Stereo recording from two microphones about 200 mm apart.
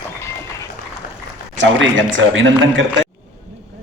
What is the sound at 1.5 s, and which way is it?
A man's voice, 65° right (ahead or behind).